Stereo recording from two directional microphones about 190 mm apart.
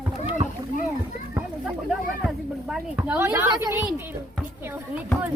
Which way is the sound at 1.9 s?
5° right (ahead or behind).